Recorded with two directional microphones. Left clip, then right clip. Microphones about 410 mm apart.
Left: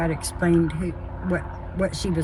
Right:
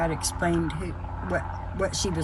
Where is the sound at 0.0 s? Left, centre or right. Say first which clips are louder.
Left 1 dB; centre.